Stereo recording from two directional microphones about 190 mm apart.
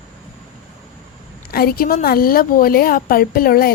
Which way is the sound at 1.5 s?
50° left (ahead or behind).